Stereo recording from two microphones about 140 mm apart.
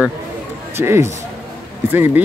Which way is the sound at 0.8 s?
20° right (ahead or behind).